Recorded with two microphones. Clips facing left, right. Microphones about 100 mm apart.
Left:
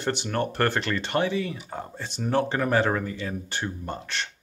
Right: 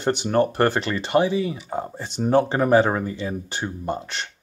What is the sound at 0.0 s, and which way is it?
Speech, 20° right (ahead or behind).